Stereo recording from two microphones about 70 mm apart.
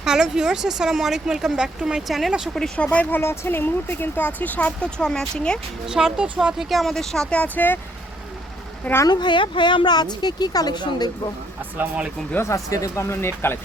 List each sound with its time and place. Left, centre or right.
0.0 s speech: centre
2.7 s speech: centre
3.2 s speech: left; by 5.5 s centre
5.9 s speech: centre
6.2 s speech: centre
6.6 s speech: centre
7.3 s speech: left
9.0 s a woman's voice: left
11.8 s speech: centre
12.4 s speech: left